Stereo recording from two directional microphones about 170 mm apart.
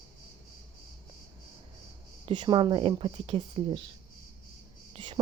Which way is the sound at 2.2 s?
30° right (ahead or behind).